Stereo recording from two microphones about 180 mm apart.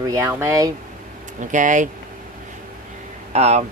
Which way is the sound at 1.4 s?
45° right (ahead or behind).